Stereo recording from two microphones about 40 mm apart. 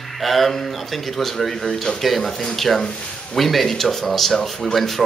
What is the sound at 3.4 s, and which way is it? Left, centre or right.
Speech, centre.